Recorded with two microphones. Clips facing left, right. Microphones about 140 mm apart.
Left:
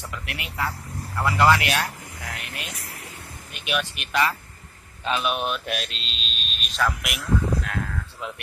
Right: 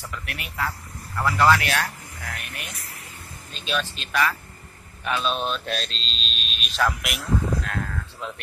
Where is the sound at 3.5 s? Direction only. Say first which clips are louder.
Even; 15° left (ahead or behind); by 6.8 s centre (ahead or behind).